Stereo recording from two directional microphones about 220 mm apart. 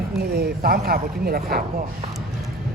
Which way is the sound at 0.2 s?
45° right (ahead or behind).